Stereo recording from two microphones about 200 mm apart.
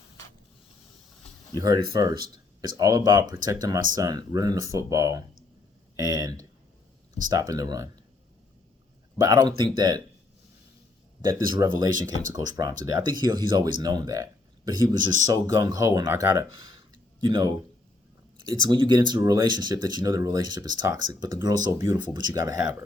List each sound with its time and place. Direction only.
1.5 s speech: 20° right (ahead or behind)
6.0 s a sound: 20° right (ahead or behind)
7.3 s speech: 15° right (ahead or behind)
9.1 s speech: 20° right (ahead or behind)
11.2 s speech: 15° right (ahead or behind)
18.7 s speech: 20° right (ahead or behind)